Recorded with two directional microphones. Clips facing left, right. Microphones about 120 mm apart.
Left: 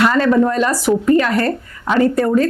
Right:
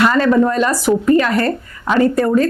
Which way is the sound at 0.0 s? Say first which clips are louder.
Right 1 dB; 20° right (ahead or behind).